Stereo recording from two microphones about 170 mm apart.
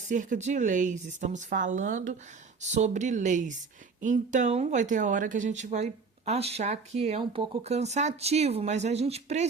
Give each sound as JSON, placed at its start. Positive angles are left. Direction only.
{"t": 0.1, "sound": "a woman's voice", "side_deg": -50}